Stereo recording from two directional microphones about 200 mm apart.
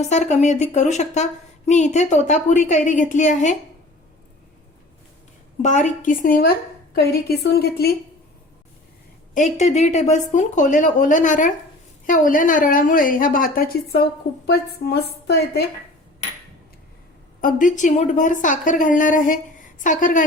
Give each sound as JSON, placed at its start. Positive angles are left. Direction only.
{"t": 0.0, "sound": "a woman's voice", "side_deg": 35}
{"t": 5.6, "sound": "a woman's voice", "side_deg": 35}
{"t": 9.3, "sound": "a woman's voice", "side_deg": 35}
{"t": 17.4, "sound": "a woman's voice", "side_deg": 40}